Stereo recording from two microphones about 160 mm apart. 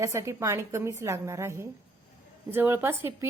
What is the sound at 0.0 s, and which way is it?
Speech, 15° right (ahead or behind).